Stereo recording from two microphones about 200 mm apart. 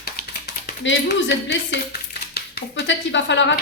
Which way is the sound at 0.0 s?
55° left (ahead or behind).